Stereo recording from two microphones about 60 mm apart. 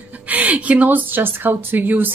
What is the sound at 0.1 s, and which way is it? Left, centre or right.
A woman's voice, right.